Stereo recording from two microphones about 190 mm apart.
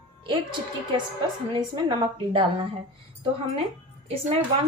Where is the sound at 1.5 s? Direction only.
25° right (ahead or behind).